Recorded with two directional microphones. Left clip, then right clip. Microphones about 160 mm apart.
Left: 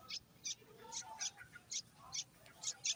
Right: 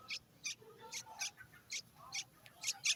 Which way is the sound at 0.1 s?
10° right (ahead or behind).